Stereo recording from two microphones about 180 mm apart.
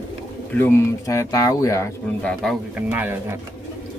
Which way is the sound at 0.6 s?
15° left (ahead or behind).